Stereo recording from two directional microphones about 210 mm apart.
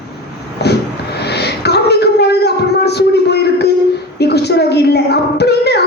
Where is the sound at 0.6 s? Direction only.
50° left (ahead or behind).